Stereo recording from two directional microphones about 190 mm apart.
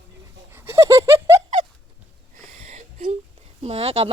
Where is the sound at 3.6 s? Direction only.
30° right (ahead or behind).